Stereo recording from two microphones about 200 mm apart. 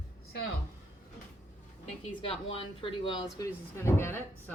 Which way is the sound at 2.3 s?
25° left (ahead or behind).